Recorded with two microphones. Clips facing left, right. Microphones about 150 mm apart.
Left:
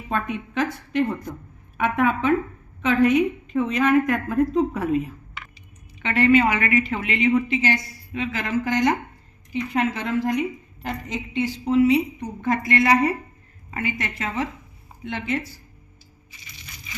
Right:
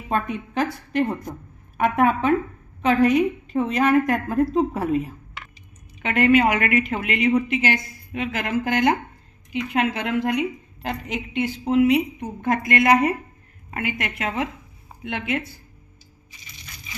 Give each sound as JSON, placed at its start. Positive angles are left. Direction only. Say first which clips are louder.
{"t": 0.1, "sound": "a woman's voice", "louder": "right 2 dB", "side_deg": -40}
{"t": 6.0, "sound": "a woman's voice", "louder": "even", "side_deg": -45}
{"t": 7.6, "sound": "a woman's voice", "louder": "even", "side_deg": -55}